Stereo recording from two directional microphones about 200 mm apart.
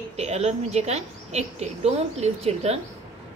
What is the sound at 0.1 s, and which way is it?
A woman's voice, 30° right (ahead or behind).